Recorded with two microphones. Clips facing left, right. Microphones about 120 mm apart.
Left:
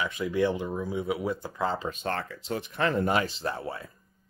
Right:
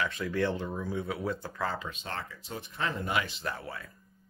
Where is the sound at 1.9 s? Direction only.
55° left (ahead or behind).